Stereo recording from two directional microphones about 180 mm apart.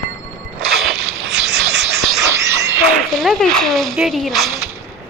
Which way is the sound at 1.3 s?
75° right (ahead or behind).